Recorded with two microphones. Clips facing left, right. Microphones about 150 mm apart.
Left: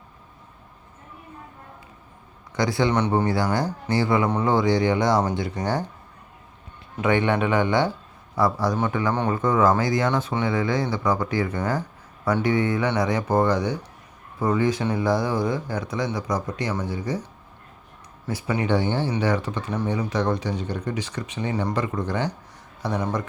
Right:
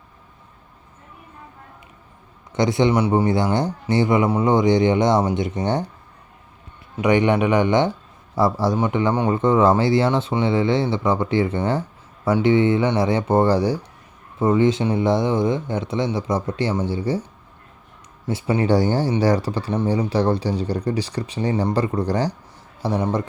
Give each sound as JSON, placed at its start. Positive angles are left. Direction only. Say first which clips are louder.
{"t": 2.5, "sound": "a man's voice", "louder": "right 4 dB", "side_deg": -20}
{"t": 2.9, "sound": "speech", "louder": "right 3 dB", "side_deg": -10}
{"t": 7.0, "sound": "speech", "louder": "right 4 dB", "side_deg": -15}
{"t": 18.3, "sound": "speech", "louder": "right 4 dB", "side_deg": -25}